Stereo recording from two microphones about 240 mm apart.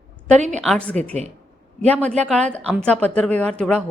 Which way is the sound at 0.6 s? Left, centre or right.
Centre.